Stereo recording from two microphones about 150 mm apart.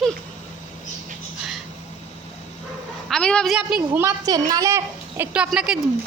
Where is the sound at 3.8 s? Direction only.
15° right (ahead or behind).